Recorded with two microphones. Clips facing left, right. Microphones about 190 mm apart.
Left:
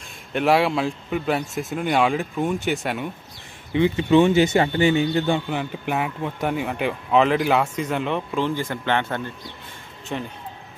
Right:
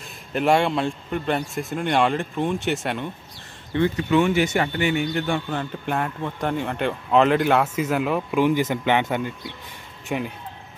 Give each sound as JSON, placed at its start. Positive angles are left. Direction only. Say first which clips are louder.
{"t": 0.3, "sound": "a man's voice", "louder": "left 1 dB", "side_deg": 0}
{"t": 3.7, "sound": "speech", "louder": "left 2 dB", "side_deg": 15}
{"t": 4.1, "sound": "a man's voice", "louder": "left 5 dB", "side_deg": 25}
{"t": 5.5, "sound": "a man's voice", "louder": "left 1 dB", "side_deg": 10}
{"t": 10.0, "sound": "speech", "louder": "right 3 dB", "side_deg": -10}